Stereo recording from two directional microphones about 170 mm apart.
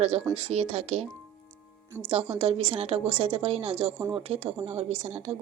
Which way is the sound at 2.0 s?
35° right (ahead or behind).